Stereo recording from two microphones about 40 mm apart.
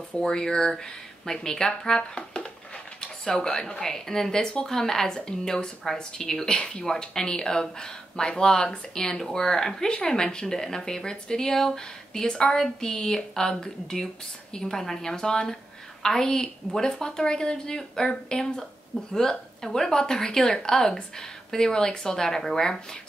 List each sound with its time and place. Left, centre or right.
0.2 s a woman's voice: centre
3.8 s a woman's voice: centre